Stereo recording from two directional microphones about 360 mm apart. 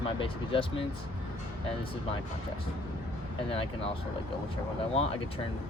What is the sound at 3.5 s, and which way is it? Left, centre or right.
Speech, centre.